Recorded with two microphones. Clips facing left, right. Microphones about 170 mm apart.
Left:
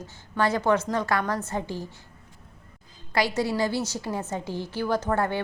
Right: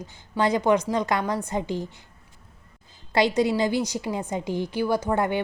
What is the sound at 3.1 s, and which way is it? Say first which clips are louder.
A woman's voice: right 4 dB; 20° right (ahead or behind).